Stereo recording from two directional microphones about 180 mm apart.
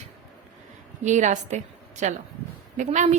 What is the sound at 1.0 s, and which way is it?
A woman's voice, 40° right (ahead or behind).